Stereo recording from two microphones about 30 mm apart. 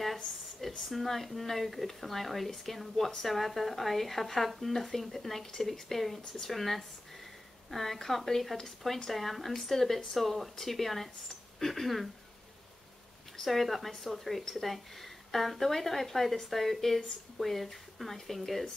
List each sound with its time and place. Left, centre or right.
0.0 s speech: centre
13.5 s speech: centre